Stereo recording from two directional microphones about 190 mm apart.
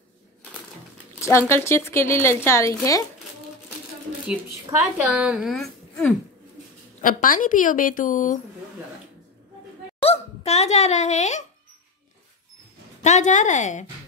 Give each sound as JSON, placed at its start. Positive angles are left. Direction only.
{"t": 1.2, "sound": "speech", "side_deg": 15}
{"t": 5.0, "sound": "a woman's voice", "side_deg": -5}
{"t": 7.0, "sound": "a woman's voice", "side_deg": 45}
{"t": 10.0, "sound": "speech", "side_deg": 35}
{"t": 13.0, "sound": "a woman's voice", "side_deg": 40}